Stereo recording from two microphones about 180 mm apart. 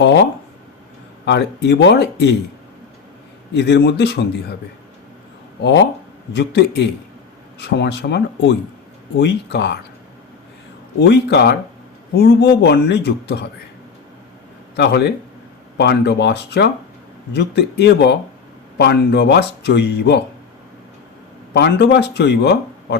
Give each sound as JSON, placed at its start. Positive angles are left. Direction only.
{"t": 1.2, "sound": "speech", "side_deg": 70}
{"t": 3.5, "sound": "speech", "side_deg": 65}
{"t": 6.3, "sound": "speech", "side_deg": 65}
{"t": 11.0, "sound": "speech", "side_deg": 70}
{"t": 14.8, "sound": "speech", "side_deg": 65}
{"t": 21.5, "sound": "speech", "side_deg": 65}